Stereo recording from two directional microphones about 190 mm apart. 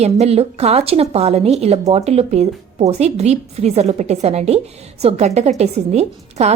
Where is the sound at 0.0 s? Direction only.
35° right (ahead or behind).